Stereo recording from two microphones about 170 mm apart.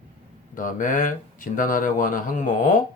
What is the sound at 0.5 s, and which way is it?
Speech, 50° left (ahead or behind).